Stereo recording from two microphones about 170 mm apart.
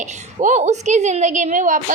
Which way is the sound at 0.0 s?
45° right (ahead or behind).